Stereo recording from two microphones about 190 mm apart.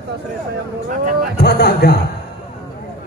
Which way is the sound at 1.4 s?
55° left (ahead or behind).